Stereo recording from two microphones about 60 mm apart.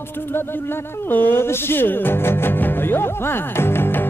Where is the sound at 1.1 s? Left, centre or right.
Left.